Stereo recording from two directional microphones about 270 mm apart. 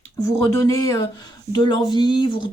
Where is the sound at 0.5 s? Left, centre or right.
Centre.